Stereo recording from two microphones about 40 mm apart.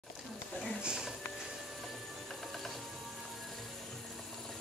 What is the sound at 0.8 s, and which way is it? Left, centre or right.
Music, centre.